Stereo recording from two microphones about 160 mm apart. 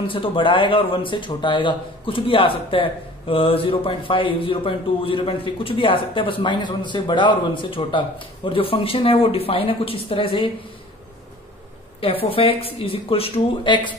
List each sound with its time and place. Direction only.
0.1 s a man's voice: 35° left (ahead or behind)
12.0 s a man's voice: 35° left (ahead or behind)